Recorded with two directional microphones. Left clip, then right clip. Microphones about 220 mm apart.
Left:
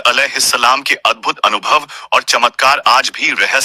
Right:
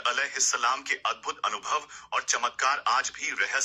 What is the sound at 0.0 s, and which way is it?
Speech, 45° left (ahead or behind).